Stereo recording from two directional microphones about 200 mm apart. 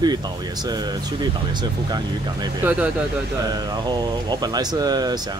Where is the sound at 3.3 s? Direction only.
20° right (ahead or behind).